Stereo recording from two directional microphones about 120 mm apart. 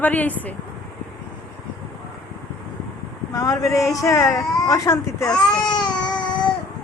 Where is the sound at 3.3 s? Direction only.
30° left (ahead or behind).